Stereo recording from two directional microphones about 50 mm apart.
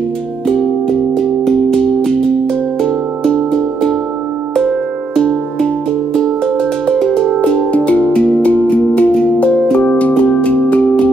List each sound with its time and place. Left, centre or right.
0.5 s music: centre
5.1 s music: centre
7.7 s music: left